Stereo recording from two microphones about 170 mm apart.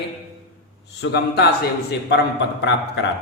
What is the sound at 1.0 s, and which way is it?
Speech, 85° left.